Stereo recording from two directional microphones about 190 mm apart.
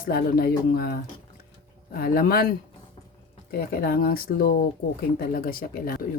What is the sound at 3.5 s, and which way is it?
Speech, 50° left (ahead or behind).